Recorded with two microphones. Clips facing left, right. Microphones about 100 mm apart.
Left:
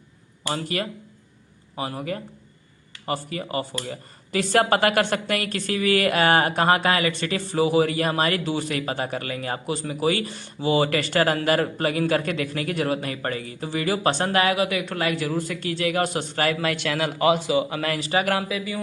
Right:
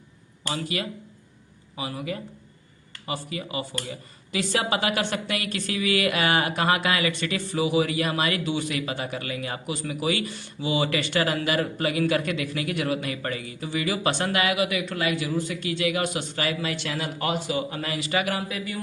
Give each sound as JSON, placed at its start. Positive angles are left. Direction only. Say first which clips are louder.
{"t": 0.5, "sound": "a man's voice", "louder": "left 2 dB", "side_deg": 45}
{"t": 18.0, "sound": "a man's voice", "louder": "left 1 dB", "side_deg": 35}